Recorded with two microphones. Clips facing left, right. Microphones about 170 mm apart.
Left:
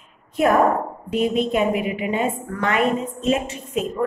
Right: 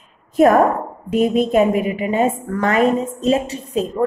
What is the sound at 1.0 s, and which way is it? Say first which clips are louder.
A woman's voice: right 5 dB; 45° right (ahead or behind).